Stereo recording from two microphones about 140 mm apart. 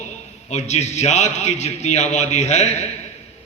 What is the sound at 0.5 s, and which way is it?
A man's voice, 55° left (ahead or behind).